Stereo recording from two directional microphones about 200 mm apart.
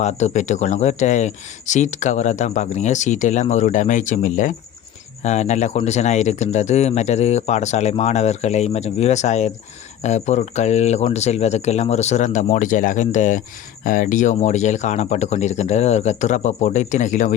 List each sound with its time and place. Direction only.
0.0 s speech: 35° left (ahead or behind)